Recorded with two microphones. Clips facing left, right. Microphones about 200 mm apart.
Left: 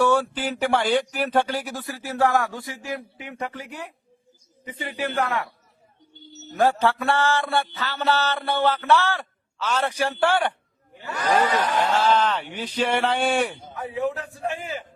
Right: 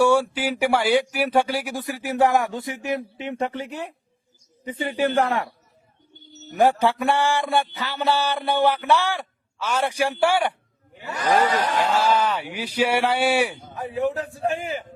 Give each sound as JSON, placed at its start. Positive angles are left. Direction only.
{"t": 0.0, "sound": "mantra", "side_deg": -10}
{"t": 1.1, "sound": "a sound", "side_deg": -10}
{"t": 6.5, "sound": "mantra", "side_deg": -15}
{"t": 13.9, "sound": "a man's voice", "side_deg": -35}